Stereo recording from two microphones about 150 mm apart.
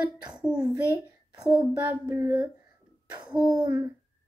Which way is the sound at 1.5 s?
10° right (ahead or behind).